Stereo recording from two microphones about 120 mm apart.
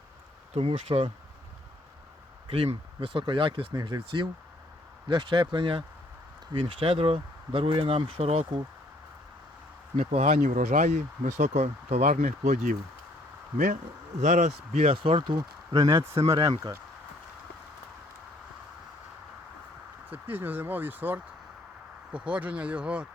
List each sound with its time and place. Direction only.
0.7 s speech: 50° right (ahead or behind)
2.5 s speech: 45° right (ahead or behind)
10.0 s speech: 70° right (ahead or behind)
14.2 s speech: 85° right; by 15.4 s 50° right (ahead or behind)
15.4 s speech: 30° right (ahead or behind)
20.1 s speech: 15° right (ahead or behind)